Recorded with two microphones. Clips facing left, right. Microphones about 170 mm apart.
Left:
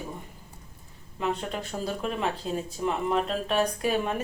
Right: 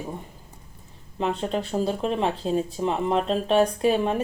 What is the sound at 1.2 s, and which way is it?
Speech, 30° right (ahead or behind).